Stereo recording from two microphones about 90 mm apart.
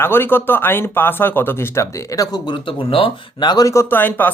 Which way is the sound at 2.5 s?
80° left.